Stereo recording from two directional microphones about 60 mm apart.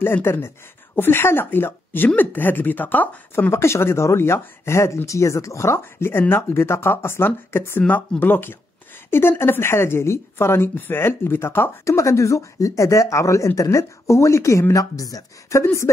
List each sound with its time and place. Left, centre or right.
0.0 s speech: left
3.5 s speech: left
11.8 s speech: left